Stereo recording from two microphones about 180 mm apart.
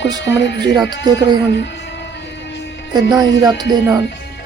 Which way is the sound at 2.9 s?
20° right (ahead or behind).